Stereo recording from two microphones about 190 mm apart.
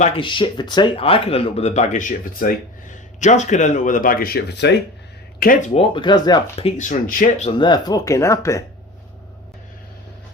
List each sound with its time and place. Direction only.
0.2 s speech: 25° left (ahead or behind); by 4.8 s 65° left (ahead or behind)
5.4 s speech: 50° left (ahead or behind)
5.7 s speech: 25° left (ahead or behind)
6.7 s speech: 40° left (ahead or behind)
7.6 s speech: 20° left (ahead or behind)